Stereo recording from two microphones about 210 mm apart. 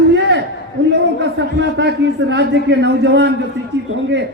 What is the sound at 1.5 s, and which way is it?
A man's voice, 60° right (ahead or behind).